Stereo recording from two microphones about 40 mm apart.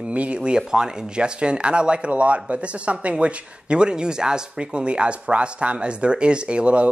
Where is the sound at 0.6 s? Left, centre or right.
Centre.